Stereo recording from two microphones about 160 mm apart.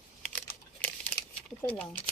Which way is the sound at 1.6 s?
10° left (ahead or behind).